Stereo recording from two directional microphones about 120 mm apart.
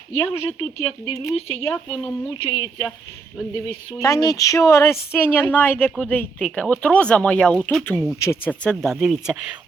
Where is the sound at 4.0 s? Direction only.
30° left (ahead or behind); by 7.6 s 10° left (ahead or behind).